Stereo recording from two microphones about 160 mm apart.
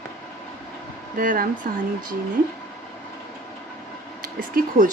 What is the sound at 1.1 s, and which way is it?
Speech, 60° right (ahead or behind).